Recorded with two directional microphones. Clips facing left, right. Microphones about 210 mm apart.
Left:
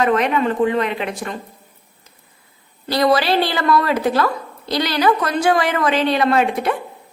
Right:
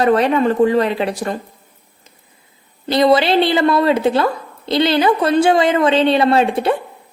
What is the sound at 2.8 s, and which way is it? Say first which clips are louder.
Speech: right 3 dB; 25° right (ahead or behind).